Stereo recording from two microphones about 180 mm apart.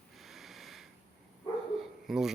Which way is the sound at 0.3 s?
Centre (ahead or behind).